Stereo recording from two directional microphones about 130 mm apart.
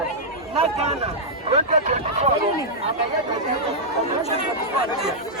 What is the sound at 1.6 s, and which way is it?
Speech, 65° right (ahead or behind).